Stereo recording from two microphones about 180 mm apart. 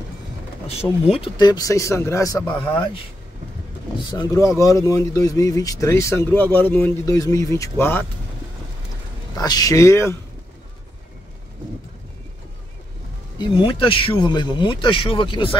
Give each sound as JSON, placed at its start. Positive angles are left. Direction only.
{"t": 1.1, "sound": "speech", "side_deg": 30}
{"t": 4.1, "sound": "speech", "side_deg": 20}
{"t": 9.4, "sound": "speech", "side_deg": 20}
{"t": 13.4, "sound": "speech", "side_deg": 30}